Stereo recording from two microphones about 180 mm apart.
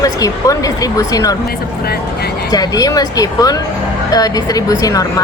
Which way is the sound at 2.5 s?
20° left (ahead or behind).